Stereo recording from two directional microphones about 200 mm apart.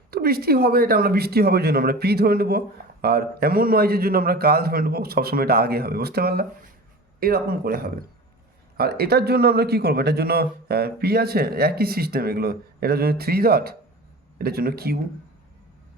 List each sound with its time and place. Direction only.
0.1 s speech: 50° right (ahead or behind)